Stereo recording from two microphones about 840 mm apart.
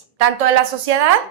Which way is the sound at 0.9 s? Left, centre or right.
Right.